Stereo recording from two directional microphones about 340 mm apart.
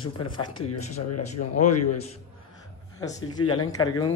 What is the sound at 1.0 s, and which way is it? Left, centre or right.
Speech, left.